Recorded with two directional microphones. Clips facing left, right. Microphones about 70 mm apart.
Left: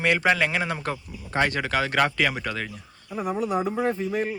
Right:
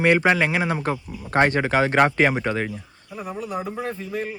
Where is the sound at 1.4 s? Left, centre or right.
Right.